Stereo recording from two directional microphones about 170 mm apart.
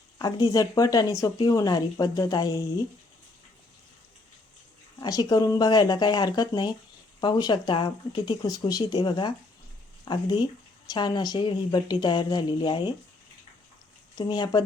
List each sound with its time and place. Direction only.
0.2 s speech: 25° left (ahead or behind)
4.9 s speech: 20° left (ahead or behind)
14.2 s speech: 25° left (ahead or behind)